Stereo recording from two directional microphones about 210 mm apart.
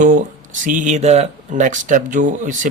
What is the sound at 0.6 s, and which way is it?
Speech, 40° right (ahead or behind).